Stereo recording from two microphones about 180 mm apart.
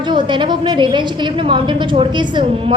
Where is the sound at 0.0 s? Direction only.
25° right (ahead or behind).